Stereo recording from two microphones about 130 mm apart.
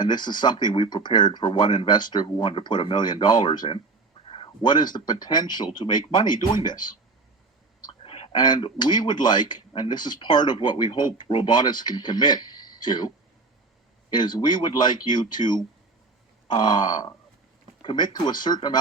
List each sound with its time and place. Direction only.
0.0 s a man's voice: 35° left (ahead or behind)
8.0 s a sound: 45° left (ahead or behind)
8.4 s a man's voice: 35° left (ahead or behind)
14.1 s a man's voice: 35° left (ahead or behind)